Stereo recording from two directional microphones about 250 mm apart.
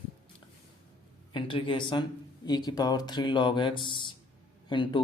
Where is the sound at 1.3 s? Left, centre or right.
Centre.